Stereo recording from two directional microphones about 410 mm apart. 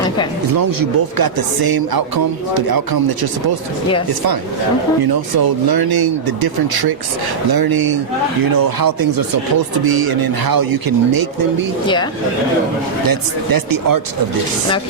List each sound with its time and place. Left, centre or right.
0.5 s speech: right
5.4 s speech: right
13.1 s speech: right